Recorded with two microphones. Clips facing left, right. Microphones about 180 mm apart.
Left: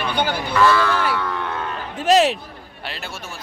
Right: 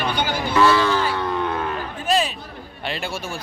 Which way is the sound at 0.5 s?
25° right (ahead or behind).